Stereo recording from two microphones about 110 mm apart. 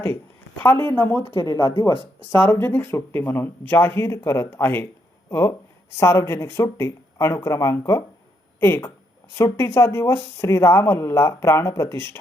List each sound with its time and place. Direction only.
0.6 s speech: 20° left (ahead or behind)